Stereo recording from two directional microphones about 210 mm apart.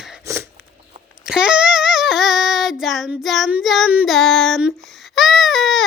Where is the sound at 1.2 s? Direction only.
5° right (ahead or behind).